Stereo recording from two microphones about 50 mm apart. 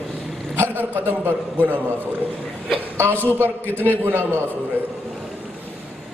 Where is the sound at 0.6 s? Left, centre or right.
Right.